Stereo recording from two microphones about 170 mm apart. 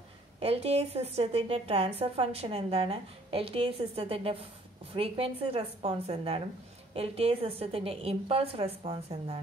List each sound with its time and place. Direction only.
0.4 s a woman's voice: 35° right (ahead or behind)